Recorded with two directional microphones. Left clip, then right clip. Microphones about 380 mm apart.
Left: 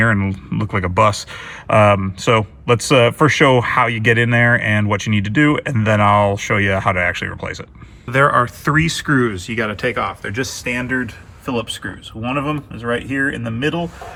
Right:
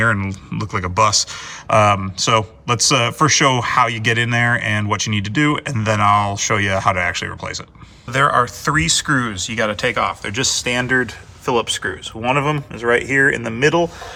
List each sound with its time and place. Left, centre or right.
0.0 s speech: centre
12.9 s speech: centre